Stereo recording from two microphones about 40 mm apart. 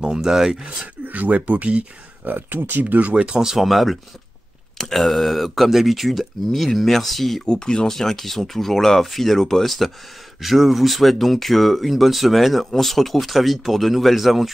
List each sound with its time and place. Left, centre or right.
0.0 s speech: centre
1.0 s speech: right
2.2 s speech: right
3.3 s speech: centre
3.6 s speech: centre
7.4 s speech: centre